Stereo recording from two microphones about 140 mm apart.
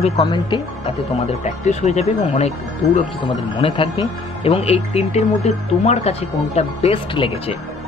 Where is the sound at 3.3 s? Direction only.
35° left (ahead or behind).